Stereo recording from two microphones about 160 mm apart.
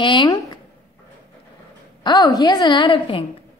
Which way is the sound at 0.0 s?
30° left (ahead or behind).